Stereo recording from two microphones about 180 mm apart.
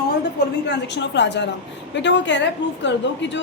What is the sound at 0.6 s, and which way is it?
A woman's voice, 75° left (ahead or behind).